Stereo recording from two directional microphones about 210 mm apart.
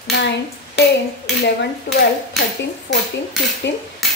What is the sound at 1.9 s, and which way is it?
Speech, 50° left (ahead or behind).